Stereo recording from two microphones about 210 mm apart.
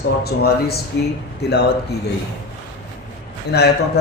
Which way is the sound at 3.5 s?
50° left (ahead or behind).